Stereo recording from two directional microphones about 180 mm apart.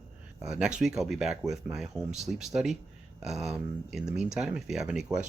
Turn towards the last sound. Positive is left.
turn(degrees=-5)  # may be behind; listen again after turning